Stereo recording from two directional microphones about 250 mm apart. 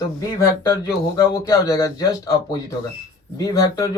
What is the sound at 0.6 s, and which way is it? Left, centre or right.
Speech, centre.